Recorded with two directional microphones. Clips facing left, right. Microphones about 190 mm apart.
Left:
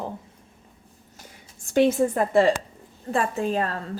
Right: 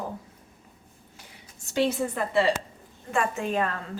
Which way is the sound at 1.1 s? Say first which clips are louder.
Left 3 dB; 50° left (ahead or behind).